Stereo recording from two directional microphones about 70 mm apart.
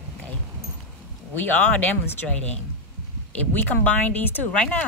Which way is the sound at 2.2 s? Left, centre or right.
Centre.